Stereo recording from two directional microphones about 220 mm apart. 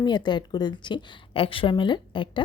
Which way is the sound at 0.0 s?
20° left (ahead or behind).